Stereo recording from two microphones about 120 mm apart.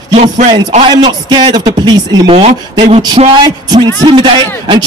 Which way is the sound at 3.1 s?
45° right (ahead or behind).